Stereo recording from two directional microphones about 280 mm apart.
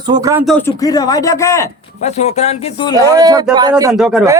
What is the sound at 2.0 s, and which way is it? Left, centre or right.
Speech, left.